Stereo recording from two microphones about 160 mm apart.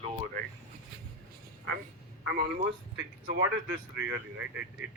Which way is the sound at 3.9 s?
10° right (ahead or behind).